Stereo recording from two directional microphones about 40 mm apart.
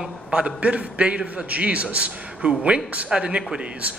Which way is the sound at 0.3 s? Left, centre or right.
Right.